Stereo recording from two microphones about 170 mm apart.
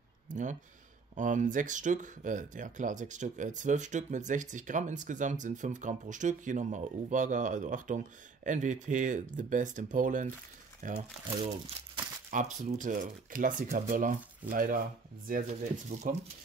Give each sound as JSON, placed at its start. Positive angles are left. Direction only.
{"t": 0.3, "sound": "speech", "side_deg": -50}